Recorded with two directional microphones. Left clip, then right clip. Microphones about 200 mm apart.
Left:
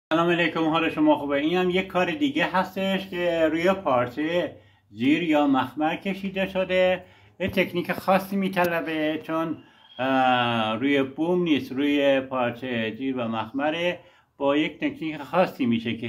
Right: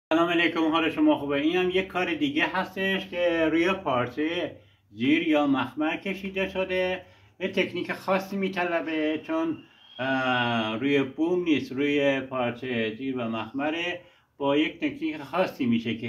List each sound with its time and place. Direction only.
0.1 s speech: 45° left (ahead or behind)